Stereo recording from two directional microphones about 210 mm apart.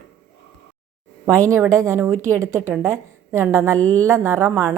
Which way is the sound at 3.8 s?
10° left (ahead or behind).